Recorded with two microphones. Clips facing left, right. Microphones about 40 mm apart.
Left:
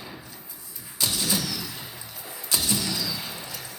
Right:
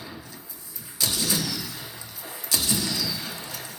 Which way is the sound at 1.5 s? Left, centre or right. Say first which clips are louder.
Even; left.